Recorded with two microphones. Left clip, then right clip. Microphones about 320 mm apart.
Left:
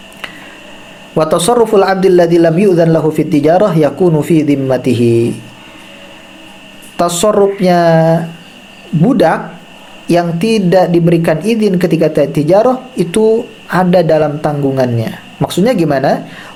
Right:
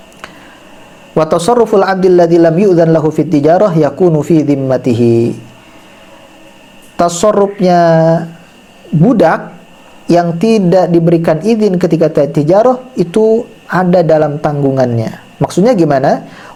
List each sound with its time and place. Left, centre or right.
1.1 s speech: centre
6.9 s speech: centre